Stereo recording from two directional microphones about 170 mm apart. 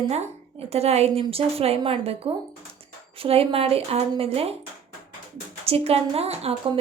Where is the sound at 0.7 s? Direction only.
35° right (ahead or behind).